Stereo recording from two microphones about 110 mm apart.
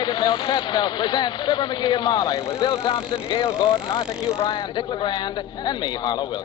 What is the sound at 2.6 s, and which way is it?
A man's voice, 50° left (ahead or behind).